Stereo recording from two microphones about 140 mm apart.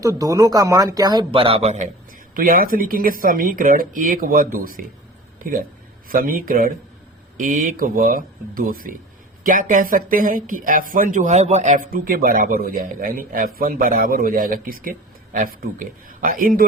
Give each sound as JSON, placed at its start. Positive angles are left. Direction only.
{"t": 0.0, "sound": "speech", "side_deg": -25}
{"t": 2.3, "sound": "speech", "side_deg": -90}
{"t": 7.3, "sound": "speech", "side_deg": -75}
{"t": 9.4, "sound": "speech", "side_deg": -75}